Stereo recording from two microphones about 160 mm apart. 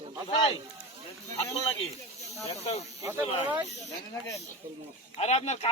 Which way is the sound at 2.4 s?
40° left (ahead or behind).